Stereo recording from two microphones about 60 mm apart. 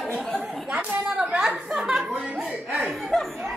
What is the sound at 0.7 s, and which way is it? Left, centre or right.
Chatter, centre.